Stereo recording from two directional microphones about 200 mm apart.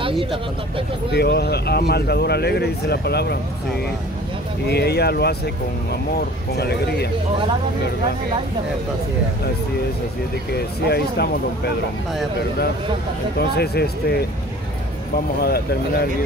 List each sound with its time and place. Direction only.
0.0 s speech: 25° right (ahead or behind)
1.1 s speech: 55° left (ahead or behind)
4.6 s speech: 55° left (ahead or behind)
10.9 s speech: 55° left (ahead or behind)
13.4 s speech: 55° left (ahead or behind)
15.4 s speech: 50° left (ahead or behind)